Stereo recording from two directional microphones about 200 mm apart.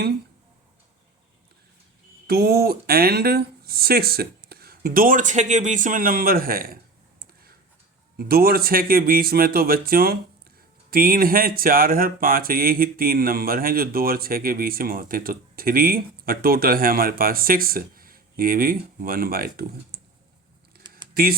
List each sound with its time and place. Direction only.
2.2 s speech: 50° right (ahead or behind)
8.1 s speech: 50° right (ahead or behind)
21.1 s computer keyboard: 50° right (ahead or behind)